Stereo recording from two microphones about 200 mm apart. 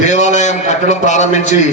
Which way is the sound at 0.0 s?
35° left (ahead or behind).